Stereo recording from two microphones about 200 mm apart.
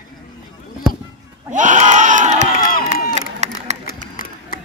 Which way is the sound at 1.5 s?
40° right (ahead or behind).